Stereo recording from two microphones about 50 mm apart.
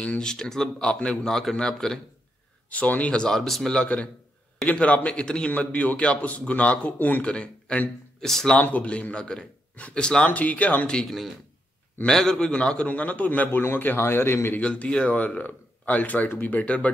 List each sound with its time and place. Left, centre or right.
0.2 s speech: centre
2.7 s a man's voice: left
3.1 s speech: centre
3.8 s a man's voice: left
7.3 s speech: centre
8.5 s a man's voice: left
10.3 s speech: left
11.1 s a man's voice: centre
12.1 s a man's voice: centre; by 14.6 s left
14.6 s a man's voice: left
15.1 s speech: left
16.6 s a man's voice: left